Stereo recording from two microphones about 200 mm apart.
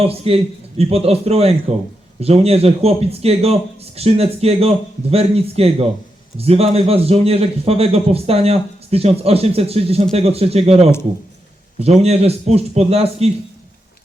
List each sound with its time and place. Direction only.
0.0 s a man's voice: 30° right (ahead or behind)